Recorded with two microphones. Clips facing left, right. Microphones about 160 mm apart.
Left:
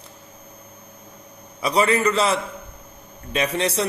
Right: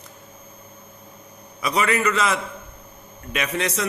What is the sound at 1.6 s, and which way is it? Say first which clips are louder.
A man's voice: left 3 dB; 30° left (ahead or behind).